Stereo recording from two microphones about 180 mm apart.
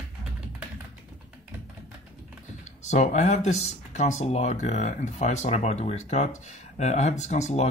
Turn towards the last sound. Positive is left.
turn(degrees=40)  # may be behind; listen again after turning